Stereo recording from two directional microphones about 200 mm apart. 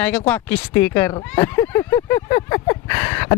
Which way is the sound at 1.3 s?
10° left (ahead or behind).